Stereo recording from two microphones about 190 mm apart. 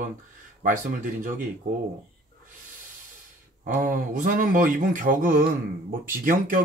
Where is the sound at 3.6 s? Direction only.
45° right (ahead or behind).